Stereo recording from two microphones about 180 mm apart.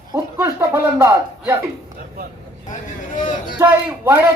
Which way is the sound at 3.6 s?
15° right (ahead or behind).